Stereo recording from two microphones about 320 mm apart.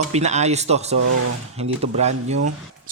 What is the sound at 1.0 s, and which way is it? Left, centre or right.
Speech, right.